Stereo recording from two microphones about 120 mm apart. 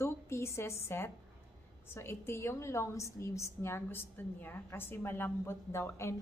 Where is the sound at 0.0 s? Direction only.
25° left (ahead or behind).